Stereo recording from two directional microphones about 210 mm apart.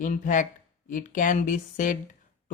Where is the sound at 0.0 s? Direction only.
40° left (ahead or behind).